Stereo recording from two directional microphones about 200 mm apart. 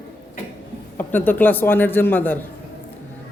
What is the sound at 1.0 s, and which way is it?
Speech, 10° left (ahead or behind).